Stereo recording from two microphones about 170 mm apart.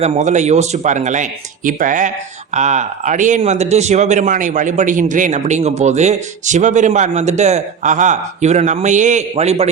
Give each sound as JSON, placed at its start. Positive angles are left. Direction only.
{"t": 0.0, "sound": "speech", "side_deg": -40}